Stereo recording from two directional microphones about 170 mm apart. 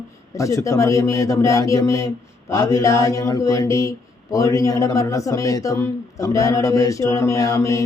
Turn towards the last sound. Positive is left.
turn(degrees=20)  # may be behind; listen again after turning